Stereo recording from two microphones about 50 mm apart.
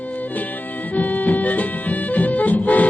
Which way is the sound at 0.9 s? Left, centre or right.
Left.